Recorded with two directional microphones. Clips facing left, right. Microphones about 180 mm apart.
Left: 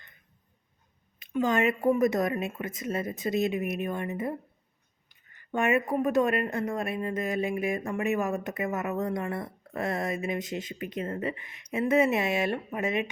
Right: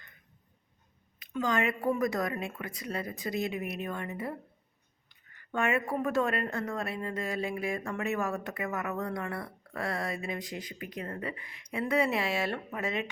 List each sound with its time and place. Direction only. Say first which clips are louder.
1.3 s speech: left 4 dB; 20° left (ahead or behind)